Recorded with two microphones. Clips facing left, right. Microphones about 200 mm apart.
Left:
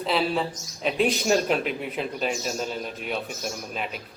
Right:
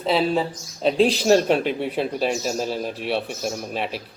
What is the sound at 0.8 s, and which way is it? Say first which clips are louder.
Speech: right 5 dB; 30° right (ahead or behind).